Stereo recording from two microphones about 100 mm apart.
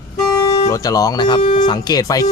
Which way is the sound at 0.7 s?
35° left (ahead or behind).